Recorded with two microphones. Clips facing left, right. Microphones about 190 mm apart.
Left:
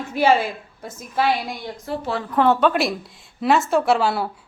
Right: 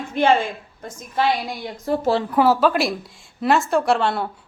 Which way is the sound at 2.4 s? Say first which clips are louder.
Left 2 dB; 5° right (ahead or behind).